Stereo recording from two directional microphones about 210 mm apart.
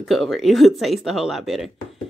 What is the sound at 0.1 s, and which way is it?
Speech, centre (ahead or behind).